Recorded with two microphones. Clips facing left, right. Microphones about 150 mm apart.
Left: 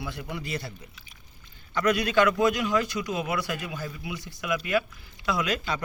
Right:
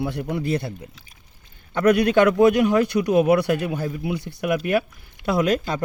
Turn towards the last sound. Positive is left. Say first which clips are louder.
# right 7 dB
turn(degrees=-50)  # may be behind; listen again after turning